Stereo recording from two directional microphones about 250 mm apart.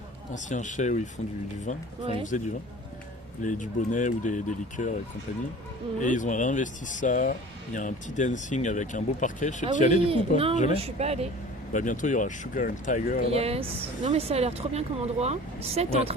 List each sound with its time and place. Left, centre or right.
0.3 s speech: left
2.3 s speech: left
6.0 s speech: left
10.0 s speech: right
11.7 s speech: left
13.3 s speech: right